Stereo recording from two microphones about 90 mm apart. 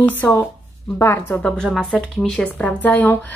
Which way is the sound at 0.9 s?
30° left (ahead or behind).